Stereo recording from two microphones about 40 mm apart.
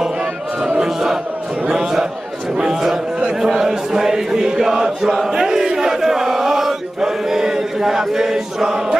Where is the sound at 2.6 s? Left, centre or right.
Centre.